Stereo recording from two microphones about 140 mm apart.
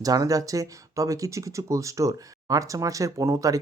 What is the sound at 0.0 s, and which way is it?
Speech, 25° right (ahead or behind).